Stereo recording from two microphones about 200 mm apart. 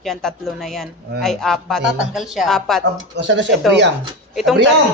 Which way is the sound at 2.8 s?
65° right (ahead or behind).